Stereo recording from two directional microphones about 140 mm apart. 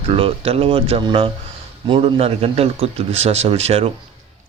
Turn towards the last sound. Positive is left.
turn(degrees=-45)  # may be behind; listen again after turning